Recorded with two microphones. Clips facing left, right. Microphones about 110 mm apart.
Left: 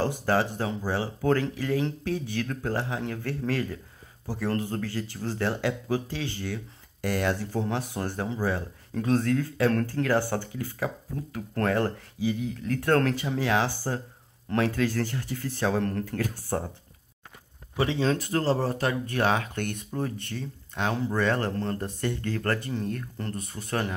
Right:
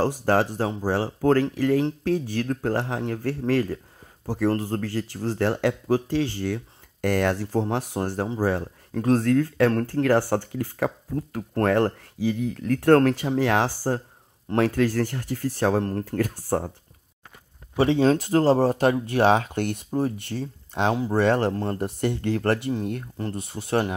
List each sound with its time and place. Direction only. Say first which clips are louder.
0.2 s speech: right 4 dB; 45° right (ahead or behind)
7.0 s speech: right 4 dB; 55° right (ahead or behind)
17.7 s speech: right 6 dB; 40° right (ahead or behind)
21.7 s speech: right 5 dB; 15° right (ahead or behind)
22.2 s speech: right 6 dB; 25° right (ahead or behind)
23.6 s speech: right 4 dB; 15° right (ahead or behind)